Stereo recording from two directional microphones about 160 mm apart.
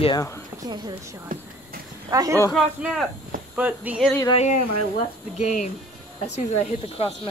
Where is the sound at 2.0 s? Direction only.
20° right (ahead or behind).